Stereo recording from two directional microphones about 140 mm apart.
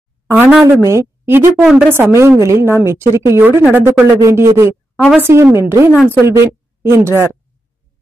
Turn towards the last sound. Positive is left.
turn(degrees=-20)  # may be behind; listen again after turning